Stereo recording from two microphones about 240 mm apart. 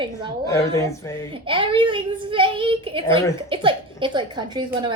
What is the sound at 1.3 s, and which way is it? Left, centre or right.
A child's voice, right.